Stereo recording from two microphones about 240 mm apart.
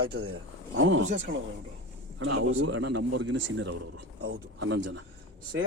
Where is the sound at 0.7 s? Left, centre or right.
Right.